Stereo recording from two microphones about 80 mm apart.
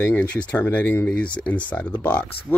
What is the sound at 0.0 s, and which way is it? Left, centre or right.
Speech, left.